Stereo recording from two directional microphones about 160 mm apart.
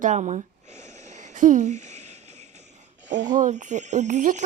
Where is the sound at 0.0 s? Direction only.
50° right (ahead or behind).